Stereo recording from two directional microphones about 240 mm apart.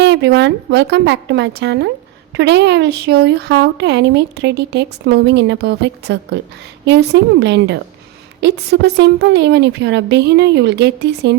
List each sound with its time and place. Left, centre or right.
0.0 s speech: right